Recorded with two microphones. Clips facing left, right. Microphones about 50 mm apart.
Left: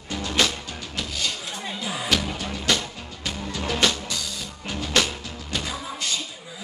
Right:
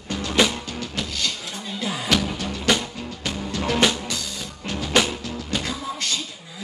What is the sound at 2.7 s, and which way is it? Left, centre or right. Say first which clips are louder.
Music: right 3 dB; centre.